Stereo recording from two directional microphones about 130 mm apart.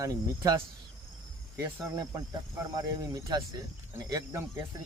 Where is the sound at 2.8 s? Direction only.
30° right (ahead or behind).